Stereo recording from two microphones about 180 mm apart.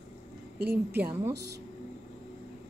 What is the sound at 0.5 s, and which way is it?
Speech, 60° right (ahead or behind).